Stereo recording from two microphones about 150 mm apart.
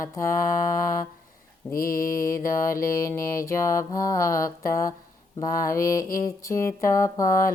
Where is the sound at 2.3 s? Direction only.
20° left (ahead or behind).